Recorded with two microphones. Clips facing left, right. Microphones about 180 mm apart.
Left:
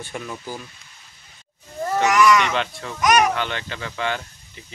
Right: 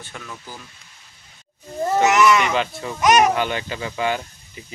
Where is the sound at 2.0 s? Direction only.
25° right (ahead or behind).